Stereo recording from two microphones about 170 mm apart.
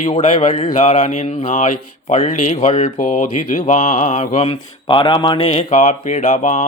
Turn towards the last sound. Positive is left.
turn(degrees=40)  # may be behind; listen again after turning